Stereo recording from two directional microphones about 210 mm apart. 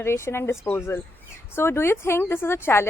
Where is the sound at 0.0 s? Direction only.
10° left (ahead or behind).